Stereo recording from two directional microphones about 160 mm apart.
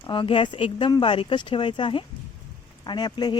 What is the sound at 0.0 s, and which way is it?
Speech, 30° left (ahead or behind).